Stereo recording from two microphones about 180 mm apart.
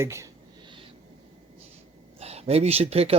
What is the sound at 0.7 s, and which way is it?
Owl, 30° right (ahead or behind).